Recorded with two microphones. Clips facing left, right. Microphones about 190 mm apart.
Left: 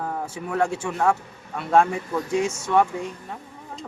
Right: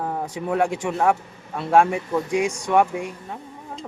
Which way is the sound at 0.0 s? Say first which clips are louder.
Right 3 dB; 15° right (ahead or behind).